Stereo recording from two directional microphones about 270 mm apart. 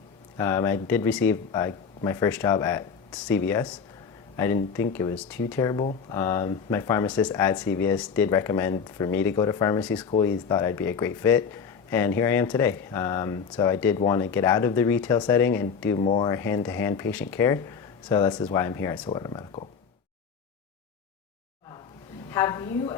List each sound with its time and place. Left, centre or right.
0.3 s speech: centre
5.8 s speech: left
6.1 s speech: centre
22.3 s speech: centre